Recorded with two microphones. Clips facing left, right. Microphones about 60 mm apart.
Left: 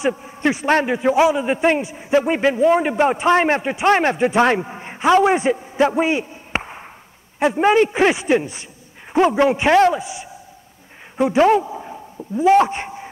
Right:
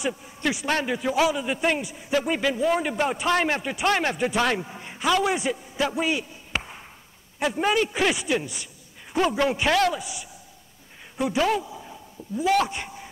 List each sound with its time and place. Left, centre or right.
0.0 s a man's voice: left